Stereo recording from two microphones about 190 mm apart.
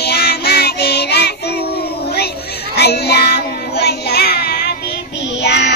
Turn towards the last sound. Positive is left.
turn(degrees=60)  # may be behind; listen again after turning